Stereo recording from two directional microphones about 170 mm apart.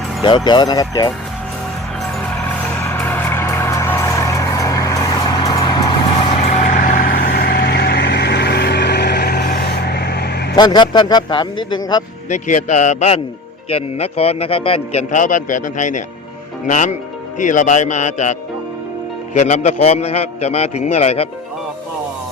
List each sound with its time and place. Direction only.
0.2 s speech: 25° left (ahead or behind)
2.8 s vehicle: 10° left (ahead or behind)
6.2 s vehicle: 45° left (ahead or behind); by 10.5 s 70° left (ahead or behind)
10.5 s speech: 25° left (ahead or behind)
12.3 s a man's voice: 45° left (ahead or behind)
15.1 s a man's voice: 50° left (ahead or behind)